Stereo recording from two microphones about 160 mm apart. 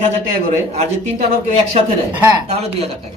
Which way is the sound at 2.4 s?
40° right (ahead or behind).